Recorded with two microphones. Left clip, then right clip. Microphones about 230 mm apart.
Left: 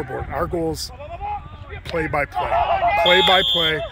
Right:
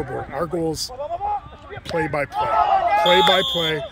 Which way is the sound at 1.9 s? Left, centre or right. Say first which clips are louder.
Left 1 dB; centre.